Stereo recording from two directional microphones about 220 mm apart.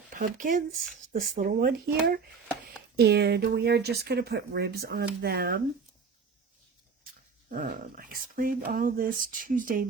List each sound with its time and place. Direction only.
0.1 s speech: 35° right (ahead or behind)
7.5 s speech: 40° right (ahead or behind)